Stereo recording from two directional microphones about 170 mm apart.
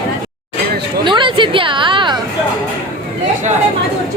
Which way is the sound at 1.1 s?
30° right (ahead or behind).